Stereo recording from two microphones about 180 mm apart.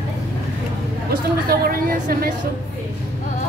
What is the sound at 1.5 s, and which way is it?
Speech, 55° right (ahead or behind).